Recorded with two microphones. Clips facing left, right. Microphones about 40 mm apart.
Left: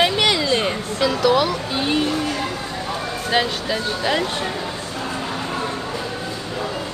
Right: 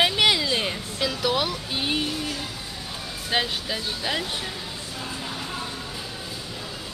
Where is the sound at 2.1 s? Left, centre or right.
Left.